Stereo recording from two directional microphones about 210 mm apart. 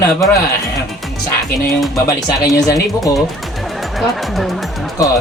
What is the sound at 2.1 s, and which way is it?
Speech, 20° left (ahead or behind).